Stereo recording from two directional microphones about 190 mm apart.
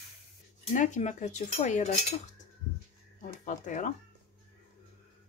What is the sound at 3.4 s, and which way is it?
Speech, 40° left (ahead or behind).